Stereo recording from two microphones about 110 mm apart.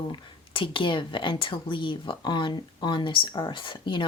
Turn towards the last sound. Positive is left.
turn(degrees=50)  # may be behind; listen again after turning